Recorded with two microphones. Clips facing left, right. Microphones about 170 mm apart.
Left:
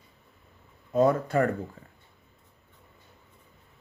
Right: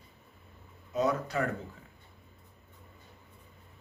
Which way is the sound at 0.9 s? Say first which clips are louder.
Left 7 dB; 50° left (ahead or behind).